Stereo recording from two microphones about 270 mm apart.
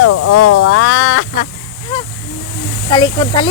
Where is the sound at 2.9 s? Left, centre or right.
Centre.